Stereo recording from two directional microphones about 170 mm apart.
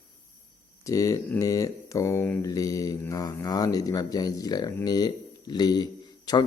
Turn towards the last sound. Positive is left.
turn(degrees=25)  # may be behind; listen again after turning